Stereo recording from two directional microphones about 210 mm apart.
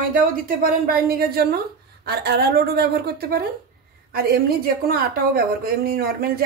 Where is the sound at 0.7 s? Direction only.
45° right (ahead or behind).